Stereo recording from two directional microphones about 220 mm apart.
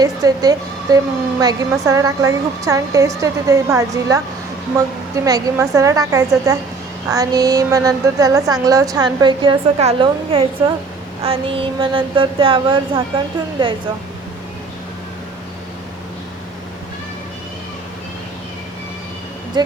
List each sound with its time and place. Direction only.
0.0 s a woman's voice: 15° right (ahead or behind)
5.2 s a woman's voice: 15° right (ahead or behind)
19.6 s speech: 20° right (ahead or behind)